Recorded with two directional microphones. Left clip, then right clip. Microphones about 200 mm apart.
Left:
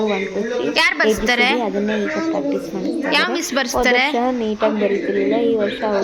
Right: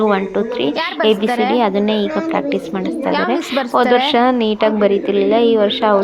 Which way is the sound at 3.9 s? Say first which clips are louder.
Left 1 dB; 25° right (ahead or behind).